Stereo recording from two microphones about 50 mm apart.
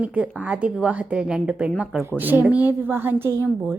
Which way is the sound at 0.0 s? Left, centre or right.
Right.